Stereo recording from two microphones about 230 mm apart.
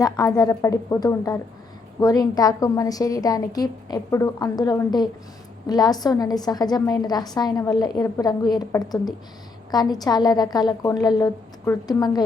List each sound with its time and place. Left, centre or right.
0.0 s a woman's voice: centre